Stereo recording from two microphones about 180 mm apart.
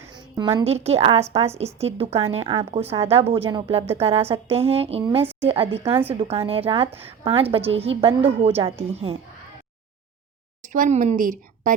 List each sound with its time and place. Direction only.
0.0 s a sound: 15° right (ahead or behind)
0.6 s a woman's voice: 35° right (ahead or behind)
10.6 s a woman's voice: 45° right (ahead or behind)